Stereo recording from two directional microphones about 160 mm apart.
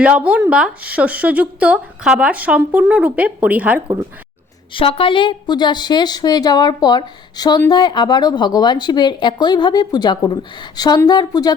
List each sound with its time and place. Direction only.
0.0 s speech: 10° right (ahead or behind)
4.7 s a woman's voice: 35° left (ahead or behind)